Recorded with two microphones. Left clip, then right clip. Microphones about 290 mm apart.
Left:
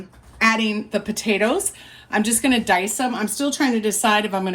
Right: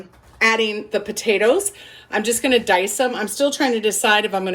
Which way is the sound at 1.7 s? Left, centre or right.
Centre.